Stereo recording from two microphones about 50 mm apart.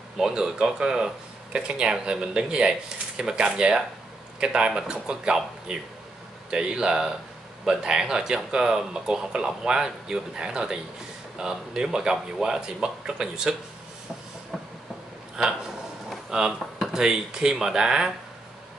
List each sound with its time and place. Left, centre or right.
0.2 s speech: centre
16.1 s a sound: centre
16.9 s speech: centre